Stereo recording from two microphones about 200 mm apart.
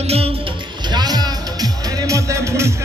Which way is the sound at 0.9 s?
20° right (ahead or behind).